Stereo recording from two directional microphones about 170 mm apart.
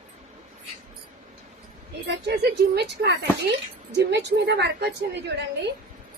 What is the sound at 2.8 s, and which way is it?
A woman's voice, 80° right.